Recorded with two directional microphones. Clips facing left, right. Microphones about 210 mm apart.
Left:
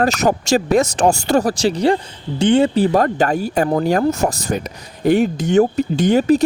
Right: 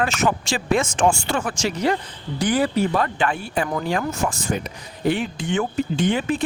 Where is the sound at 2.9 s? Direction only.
45° left (ahead or behind).